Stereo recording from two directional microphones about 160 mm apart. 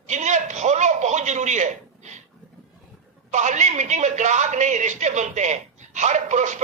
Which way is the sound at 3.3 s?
50° right (ahead or behind).